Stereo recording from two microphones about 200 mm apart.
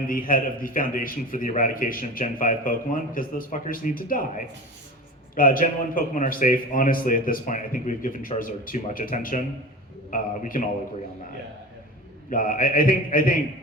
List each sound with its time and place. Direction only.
0.1 s a man's voice: 45° left (ahead or behind)
12.3 s a man's voice: 45° left (ahead or behind)